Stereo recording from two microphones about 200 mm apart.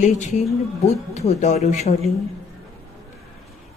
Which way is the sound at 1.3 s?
35° left (ahead or behind).